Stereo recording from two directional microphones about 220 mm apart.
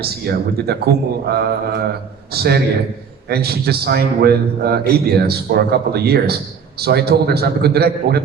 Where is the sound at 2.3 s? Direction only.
45° right (ahead or behind).